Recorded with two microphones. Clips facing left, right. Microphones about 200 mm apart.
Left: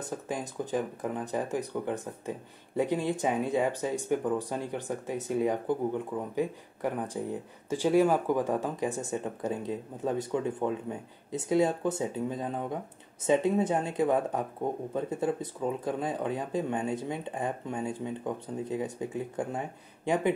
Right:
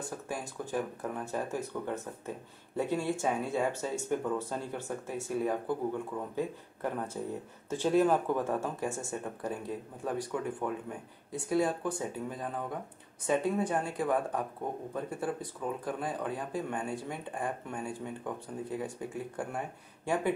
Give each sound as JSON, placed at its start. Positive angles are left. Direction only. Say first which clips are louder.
{"t": 0.0, "sound": "speech", "louder": "left 3 dB", "side_deg": 20}